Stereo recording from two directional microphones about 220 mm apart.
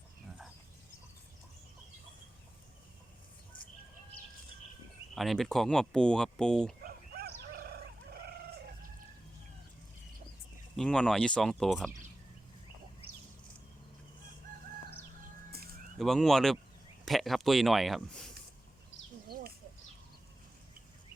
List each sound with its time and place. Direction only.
5.1 s speech: centre (ahead or behind)
6.8 s dog: 45° right (ahead or behind)
10.8 s speech: centre (ahead or behind)
16.0 s speech: centre (ahead or behind)
19.3 s a sound: 45° right (ahead or behind)